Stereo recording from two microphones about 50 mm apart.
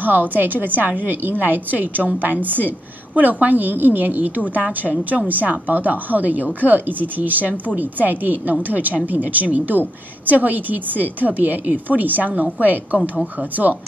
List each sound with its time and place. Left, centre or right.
0.0 s a woman's voice: right